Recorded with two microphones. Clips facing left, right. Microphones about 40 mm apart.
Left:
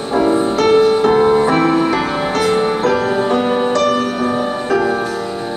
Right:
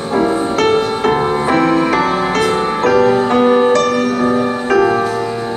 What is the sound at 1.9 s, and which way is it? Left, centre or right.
Music, right.